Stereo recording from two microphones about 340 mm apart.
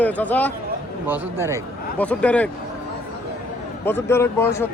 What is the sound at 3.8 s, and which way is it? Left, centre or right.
Speech, centre.